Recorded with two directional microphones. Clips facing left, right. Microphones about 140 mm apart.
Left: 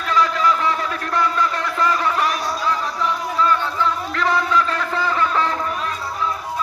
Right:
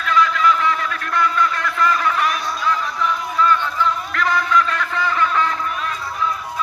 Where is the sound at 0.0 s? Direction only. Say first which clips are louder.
Right 1 dB; 35° left (ahead or behind).